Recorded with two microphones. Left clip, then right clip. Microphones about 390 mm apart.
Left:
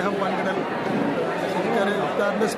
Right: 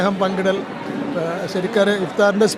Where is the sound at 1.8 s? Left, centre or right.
Right.